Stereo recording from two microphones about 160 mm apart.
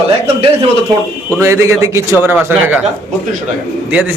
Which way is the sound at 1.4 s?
20° right (ahead or behind).